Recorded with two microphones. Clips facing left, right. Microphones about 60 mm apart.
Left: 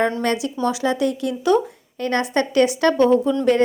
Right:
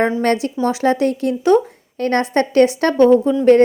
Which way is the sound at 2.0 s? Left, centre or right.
Right.